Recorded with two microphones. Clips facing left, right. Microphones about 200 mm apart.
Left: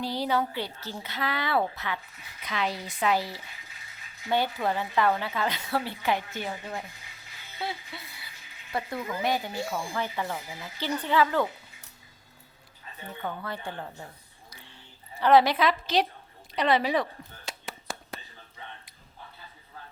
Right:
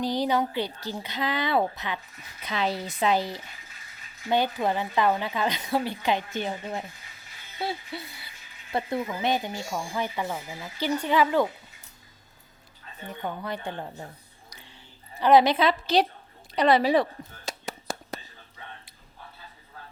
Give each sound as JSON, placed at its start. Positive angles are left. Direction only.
{"t": 0.0, "sound": "speech", "side_deg": -15}
{"t": 2.5, "sound": "speech", "side_deg": -30}
{"t": 8.7, "sound": "speech", "side_deg": -25}
{"t": 13.1, "sound": "speech", "side_deg": -15}
{"t": 15.2, "sound": "speech", "side_deg": -15}
{"t": 15.5, "sound": "a woman's voice", "side_deg": -30}
{"t": 16.6, "sound": "whispering", "side_deg": -35}